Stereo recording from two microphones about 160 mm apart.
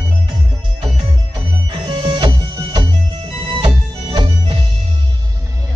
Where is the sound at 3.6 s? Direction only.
30° right (ahead or behind).